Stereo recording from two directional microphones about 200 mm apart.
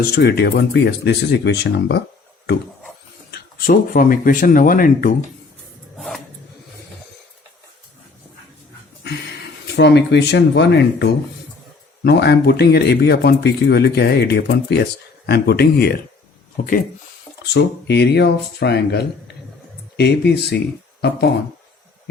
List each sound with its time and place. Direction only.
0.0 s speech: 50° left (ahead or behind)
3.3 s speech: 45° left (ahead or behind)
6.0 s a sound: centre (ahead or behind)
9.0 s speech: 55° left (ahead or behind)
17.4 s speech: 55° left (ahead or behind)